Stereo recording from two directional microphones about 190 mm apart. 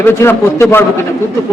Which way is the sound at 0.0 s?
10° left (ahead or behind).